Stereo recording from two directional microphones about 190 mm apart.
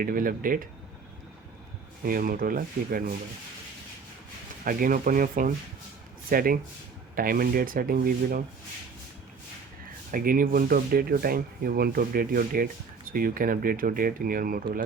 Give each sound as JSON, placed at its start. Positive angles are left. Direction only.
{"t": 0.0, "sound": "speech", "side_deg": -45}
{"t": 2.0, "sound": "speech", "side_deg": -50}
{"t": 4.6, "sound": "speech", "side_deg": -45}
{"t": 10.1, "sound": "speech", "side_deg": -45}